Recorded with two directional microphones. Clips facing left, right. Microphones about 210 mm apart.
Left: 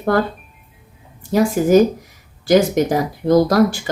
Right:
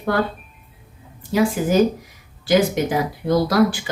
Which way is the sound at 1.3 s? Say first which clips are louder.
Left 4 dB; 45° left (ahead or behind).